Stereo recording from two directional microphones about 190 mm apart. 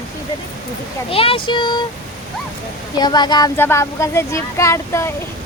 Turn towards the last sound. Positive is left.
turn(degrees=15)  # may be behind; listen again after turning